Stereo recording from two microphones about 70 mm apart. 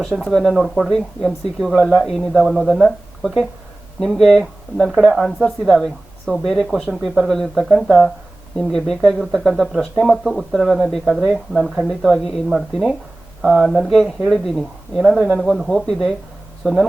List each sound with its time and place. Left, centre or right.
0.1 s speech: right
0.4 s a woman's voice: centre
1.7 s speech: centre
2.0 s a woman's voice: centre
4.9 s a woman's voice: centre
13.4 s a woman's voice: centre
15.0 s a woman's voice: centre